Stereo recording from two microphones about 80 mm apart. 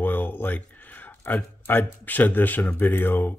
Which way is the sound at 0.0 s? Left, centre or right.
Left.